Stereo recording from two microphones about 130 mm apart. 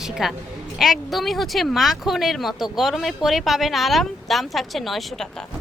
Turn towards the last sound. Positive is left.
turn(degrees=0)  # may be behind; listen again after turning